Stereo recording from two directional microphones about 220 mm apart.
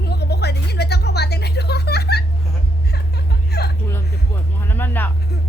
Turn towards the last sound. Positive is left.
turn(degrees=10)  # may be behind; listen again after turning